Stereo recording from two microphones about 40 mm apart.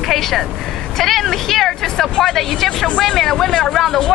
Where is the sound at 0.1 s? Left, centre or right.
Centre.